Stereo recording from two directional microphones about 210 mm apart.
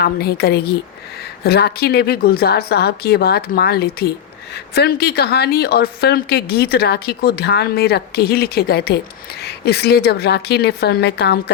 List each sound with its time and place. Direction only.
0.0 s a woman's voice: 50° left (ahead or behind)